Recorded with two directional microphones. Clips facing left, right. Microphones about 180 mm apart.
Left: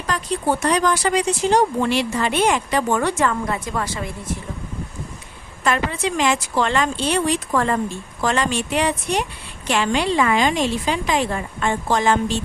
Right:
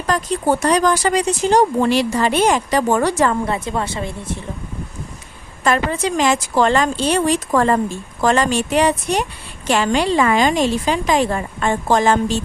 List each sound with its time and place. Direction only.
0.1 s speech: 45° right (ahead or behind); by 4.4 s 25° right (ahead or behind)
5.6 s a woman's voice: 40° right (ahead or behind)